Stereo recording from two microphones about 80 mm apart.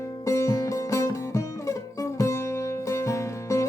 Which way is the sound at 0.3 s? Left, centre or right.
Left.